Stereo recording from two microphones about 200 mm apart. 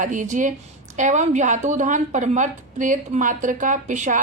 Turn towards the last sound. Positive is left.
turn(degrees=-40)  # may be behind; listen again after turning